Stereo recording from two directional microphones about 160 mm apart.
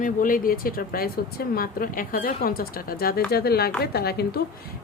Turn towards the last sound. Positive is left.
turn(degrees=80)